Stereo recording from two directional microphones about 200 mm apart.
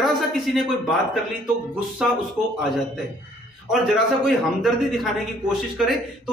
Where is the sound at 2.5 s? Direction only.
Centre (ahead or behind).